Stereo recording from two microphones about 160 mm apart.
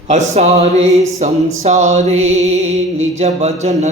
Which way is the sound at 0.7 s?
40° right (ahead or behind).